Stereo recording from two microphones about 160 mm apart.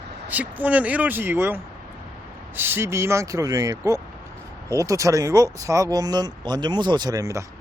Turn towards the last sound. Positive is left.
turn(degrees=-20)  # may be behind; listen again after turning